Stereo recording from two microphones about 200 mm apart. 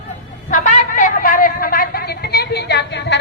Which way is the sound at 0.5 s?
40° left (ahead or behind).